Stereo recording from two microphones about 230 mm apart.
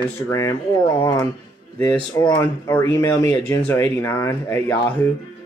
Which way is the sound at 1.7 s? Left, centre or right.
Centre.